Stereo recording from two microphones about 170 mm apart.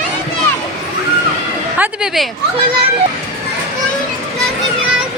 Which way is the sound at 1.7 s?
5° right (ahead or behind).